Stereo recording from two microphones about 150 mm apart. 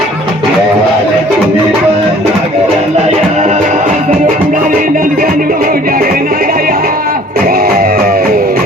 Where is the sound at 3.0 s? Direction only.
50° right (ahead or behind).